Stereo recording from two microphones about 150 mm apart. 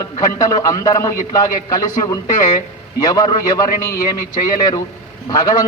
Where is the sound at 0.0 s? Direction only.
25° left (ahead or behind).